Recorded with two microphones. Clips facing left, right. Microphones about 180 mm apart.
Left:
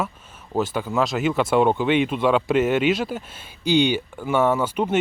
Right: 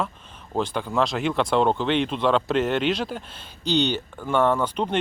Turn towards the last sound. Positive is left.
turn(degrees=5)  # may be behind; listen again after turning